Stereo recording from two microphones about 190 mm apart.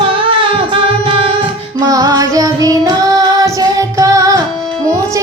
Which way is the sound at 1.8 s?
20° right (ahead or behind).